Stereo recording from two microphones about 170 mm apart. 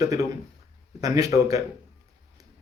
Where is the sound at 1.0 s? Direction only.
20° right (ahead or behind).